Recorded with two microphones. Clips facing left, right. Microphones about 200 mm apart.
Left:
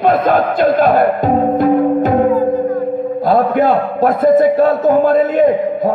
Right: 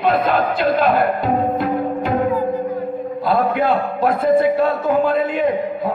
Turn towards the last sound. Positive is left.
turn(degrees=45)  # may be behind; listen again after turning